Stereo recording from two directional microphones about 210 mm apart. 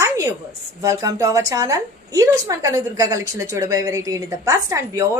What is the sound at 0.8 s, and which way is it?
A woman's voice, 15° right (ahead or behind).